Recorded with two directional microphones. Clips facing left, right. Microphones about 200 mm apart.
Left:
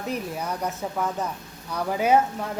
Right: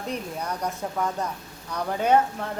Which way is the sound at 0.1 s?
5° left (ahead or behind).